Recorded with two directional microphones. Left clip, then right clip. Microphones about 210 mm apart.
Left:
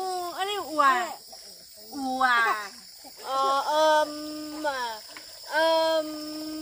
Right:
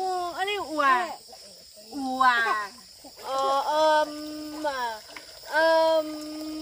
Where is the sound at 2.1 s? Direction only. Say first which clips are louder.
Right 1 dB; 5° right (ahead or behind).